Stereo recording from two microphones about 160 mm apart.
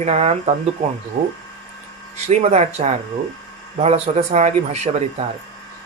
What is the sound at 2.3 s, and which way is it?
A man's voice, 45° right (ahead or behind).